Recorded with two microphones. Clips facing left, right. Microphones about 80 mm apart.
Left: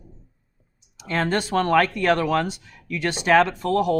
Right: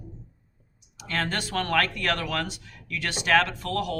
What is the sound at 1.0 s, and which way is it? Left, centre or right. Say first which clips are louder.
Speech: left 6 dB; left.